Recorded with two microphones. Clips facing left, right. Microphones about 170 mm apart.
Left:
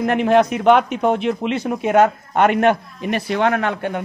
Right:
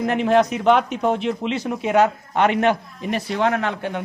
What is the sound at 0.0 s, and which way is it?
A man's voice, 60° left (ahead or behind).